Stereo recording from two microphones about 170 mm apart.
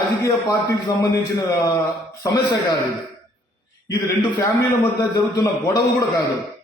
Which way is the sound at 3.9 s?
20° left (ahead or behind).